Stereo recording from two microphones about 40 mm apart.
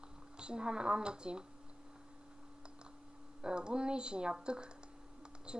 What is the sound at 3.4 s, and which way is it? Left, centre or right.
A woman's voice, right.